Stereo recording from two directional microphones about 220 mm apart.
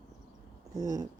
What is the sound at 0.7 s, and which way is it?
Speech, 15° right (ahead or behind).